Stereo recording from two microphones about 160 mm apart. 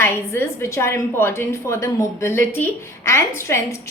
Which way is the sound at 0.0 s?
15° left (ahead or behind).